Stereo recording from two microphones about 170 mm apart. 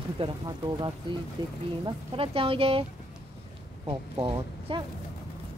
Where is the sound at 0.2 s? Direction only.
35° right (ahead or behind).